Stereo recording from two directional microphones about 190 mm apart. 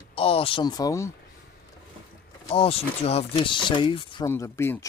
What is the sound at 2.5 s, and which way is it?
Speech, 30° left (ahead or behind).